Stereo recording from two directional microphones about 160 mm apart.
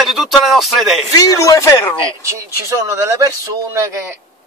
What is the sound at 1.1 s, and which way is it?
Speech, 20° left (ahead or behind).